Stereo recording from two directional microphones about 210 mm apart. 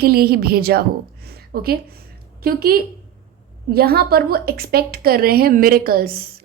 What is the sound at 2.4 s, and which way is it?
A woman's voice, 45° right (ahead or behind).